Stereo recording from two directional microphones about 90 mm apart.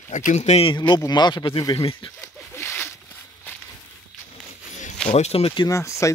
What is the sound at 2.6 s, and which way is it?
Zipper, 25° left (ahead or behind).